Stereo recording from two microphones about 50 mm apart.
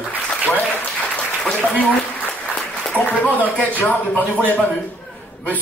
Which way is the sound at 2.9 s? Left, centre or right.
Left.